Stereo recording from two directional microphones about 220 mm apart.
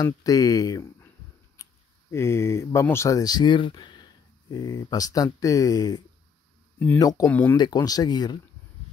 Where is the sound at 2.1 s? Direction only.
10° left (ahead or behind).